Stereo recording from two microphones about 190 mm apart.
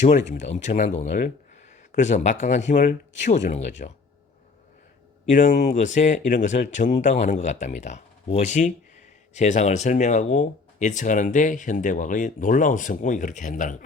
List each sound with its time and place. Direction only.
0.0 s speech: 40° left (ahead or behind)
5.3 s speech: 40° left (ahead or behind)